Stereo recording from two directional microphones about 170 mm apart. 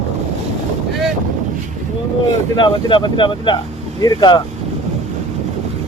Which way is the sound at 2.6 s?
25° left (ahead or behind).